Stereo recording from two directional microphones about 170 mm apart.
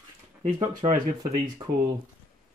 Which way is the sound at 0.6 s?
25° right (ahead or behind).